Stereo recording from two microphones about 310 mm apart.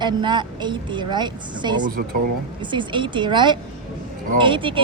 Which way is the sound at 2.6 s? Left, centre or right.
Centre.